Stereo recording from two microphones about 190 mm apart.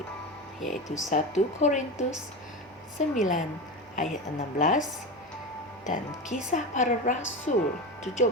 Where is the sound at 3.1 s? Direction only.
40° left (ahead or behind).